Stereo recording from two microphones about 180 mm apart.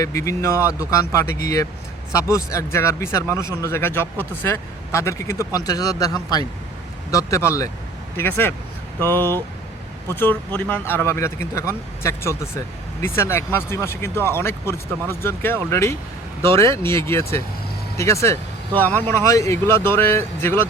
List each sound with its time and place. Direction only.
0.0 s speech: 15° left (ahead or behind)